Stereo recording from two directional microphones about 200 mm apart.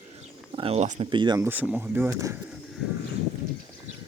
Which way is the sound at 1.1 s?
25° right (ahead or behind).